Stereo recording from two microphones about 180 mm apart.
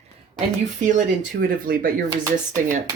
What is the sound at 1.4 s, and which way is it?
Speech, 50° right (ahead or behind).